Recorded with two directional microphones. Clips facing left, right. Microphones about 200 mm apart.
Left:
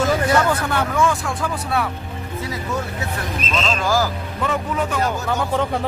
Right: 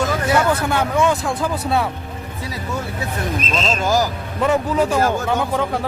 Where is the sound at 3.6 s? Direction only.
25° right (ahead or behind).